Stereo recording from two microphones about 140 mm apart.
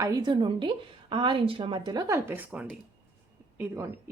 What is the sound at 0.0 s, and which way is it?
A woman's voice, 30° right (ahead or behind).